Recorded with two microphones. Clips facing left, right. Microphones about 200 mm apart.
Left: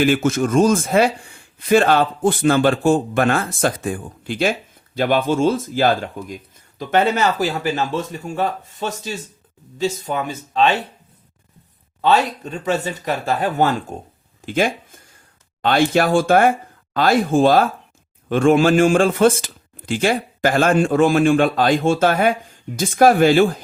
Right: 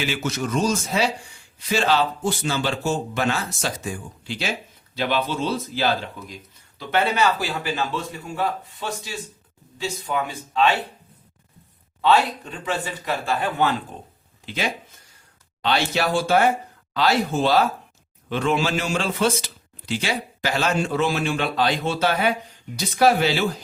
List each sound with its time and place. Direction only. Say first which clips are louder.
0.0 s speech: left 9 dB; 50° left (ahead or behind)
10.3 s speech: left 4 dB; 20° left (ahead or behind)
12.0 s speech: left 2 dB; 40° left (ahead or behind)